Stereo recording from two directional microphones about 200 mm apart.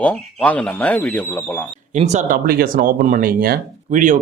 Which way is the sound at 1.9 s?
35° right (ahead or behind).